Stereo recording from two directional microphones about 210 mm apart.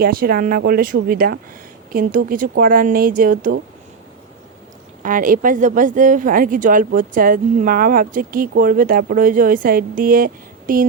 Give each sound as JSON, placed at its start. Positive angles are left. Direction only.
{"t": 0.0, "sound": "speech", "side_deg": -45}
{"t": 5.0, "sound": "speech", "side_deg": -40}